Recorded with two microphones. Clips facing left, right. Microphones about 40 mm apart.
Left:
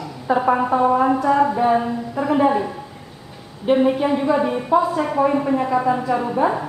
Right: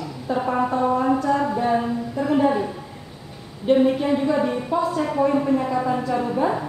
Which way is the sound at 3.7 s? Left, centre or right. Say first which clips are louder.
Left 1 dB; centre.